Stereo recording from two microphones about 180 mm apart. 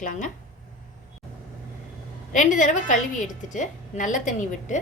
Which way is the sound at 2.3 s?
45° left (ahead or behind).